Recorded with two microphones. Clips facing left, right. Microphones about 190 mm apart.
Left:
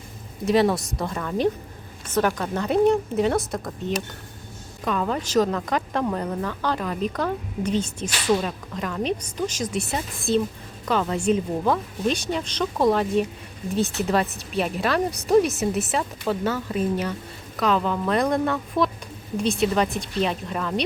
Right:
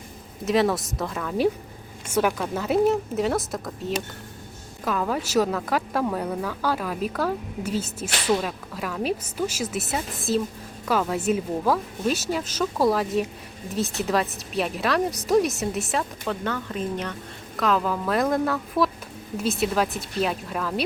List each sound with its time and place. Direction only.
0.4 s speech: centre (ahead or behind)